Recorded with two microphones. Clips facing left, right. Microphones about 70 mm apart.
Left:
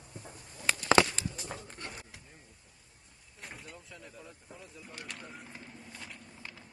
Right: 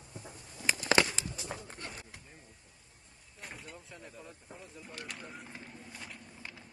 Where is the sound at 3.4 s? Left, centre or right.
Centre.